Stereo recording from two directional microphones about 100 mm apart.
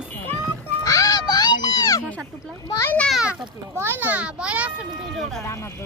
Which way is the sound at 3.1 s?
10° right (ahead or behind).